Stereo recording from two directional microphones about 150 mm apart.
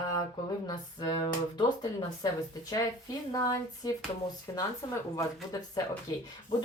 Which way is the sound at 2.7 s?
25° left (ahead or behind).